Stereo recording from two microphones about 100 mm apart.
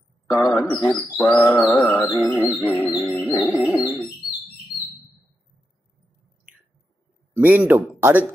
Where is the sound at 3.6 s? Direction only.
30° left (ahead or behind).